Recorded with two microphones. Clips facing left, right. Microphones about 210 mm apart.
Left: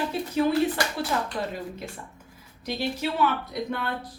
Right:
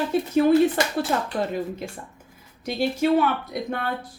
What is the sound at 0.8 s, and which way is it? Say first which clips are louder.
Speech: right 4 dB; 20° right (ahead or behind).